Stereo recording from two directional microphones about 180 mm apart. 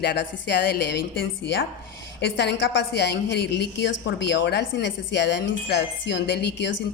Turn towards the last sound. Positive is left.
turn(degrees=70)  # may be behind; listen again after turning